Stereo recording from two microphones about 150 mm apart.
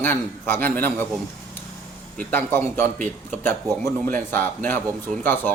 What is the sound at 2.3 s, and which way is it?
A man's voice, 15° left (ahead or behind).